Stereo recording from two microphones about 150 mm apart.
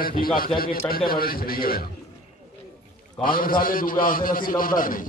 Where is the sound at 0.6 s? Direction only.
75° left (ahead or behind).